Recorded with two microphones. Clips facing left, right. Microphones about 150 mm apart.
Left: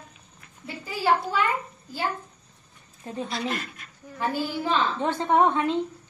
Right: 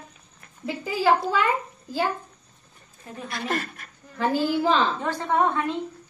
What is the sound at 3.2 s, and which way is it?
Speech, 50° right (ahead or behind).